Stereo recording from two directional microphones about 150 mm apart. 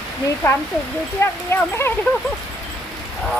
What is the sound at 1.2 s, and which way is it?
Speech, 15° left (ahead or behind).